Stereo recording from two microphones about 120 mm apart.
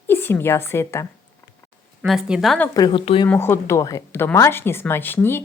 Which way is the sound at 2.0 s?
5° right (ahead or behind).